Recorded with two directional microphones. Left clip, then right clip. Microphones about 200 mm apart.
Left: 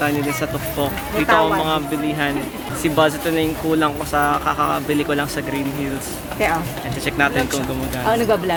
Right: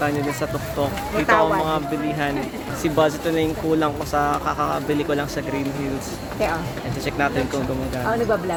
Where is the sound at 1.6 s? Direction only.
Centre (ahead or behind).